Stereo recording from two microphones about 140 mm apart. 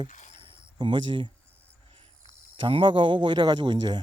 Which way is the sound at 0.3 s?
40° right (ahead or behind).